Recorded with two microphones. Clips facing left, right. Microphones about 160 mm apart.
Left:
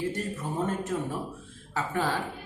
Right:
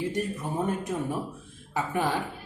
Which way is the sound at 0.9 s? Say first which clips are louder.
Right 1 dB; 15° right (ahead or behind).